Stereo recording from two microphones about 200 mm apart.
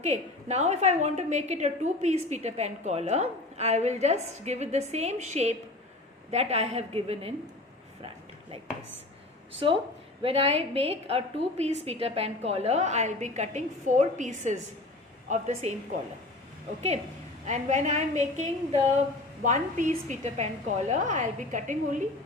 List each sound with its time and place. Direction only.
0.0 s a woman's voice: 35° right (ahead or behind)
10.2 s a woman's voice: 30° right (ahead or behind)
17.4 s a woman's voice: 35° right (ahead or behind)